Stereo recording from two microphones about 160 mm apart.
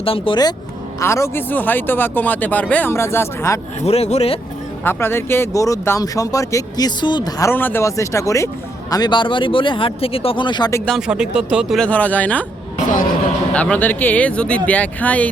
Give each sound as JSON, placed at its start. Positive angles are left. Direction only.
{"t": 0.0, "sound": "speech", "side_deg": 35}
{"t": 0.9, "sound": "speech", "side_deg": 20}
{"t": 3.8, "sound": "speech", "side_deg": 40}
{"t": 4.8, "sound": "speech", "side_deg": 15}
{"t": 10.8, "sound": "speech", "side_deg": 0}
{"t": 11.8, "sound": "speech", "side_deg": 10}
{"t": 12.7, "sound": "a sound", "side_deg": 50}
{"t": 13.5, "sound": "speech", "side_deg": 10}